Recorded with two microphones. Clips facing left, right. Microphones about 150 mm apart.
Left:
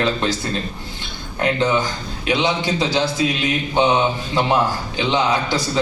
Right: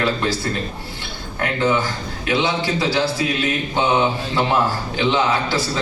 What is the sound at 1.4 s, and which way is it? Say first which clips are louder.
A man's voice: left 1 dB; 20° left (ahead or behind).